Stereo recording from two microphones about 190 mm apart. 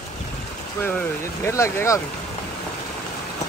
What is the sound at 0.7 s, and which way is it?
Speech, 10° left (ahead or behind).